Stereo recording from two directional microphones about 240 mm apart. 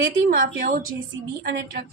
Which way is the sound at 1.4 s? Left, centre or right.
Right.